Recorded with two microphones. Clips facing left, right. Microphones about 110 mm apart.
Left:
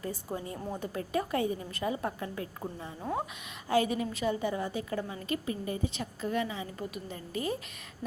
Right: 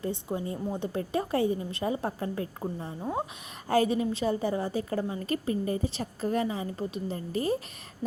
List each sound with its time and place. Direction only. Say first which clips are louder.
0.0 s a woman's voice: right 5 dB; 25° right (ahead or behind)